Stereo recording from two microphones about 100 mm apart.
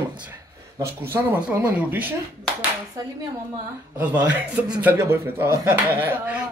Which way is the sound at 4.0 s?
15° right (ahead or behind).